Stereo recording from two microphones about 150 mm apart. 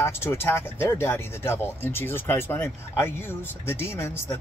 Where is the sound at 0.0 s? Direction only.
15° left (ahead or behind).